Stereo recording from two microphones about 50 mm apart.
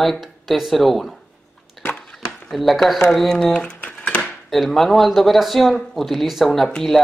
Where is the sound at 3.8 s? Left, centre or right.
Left.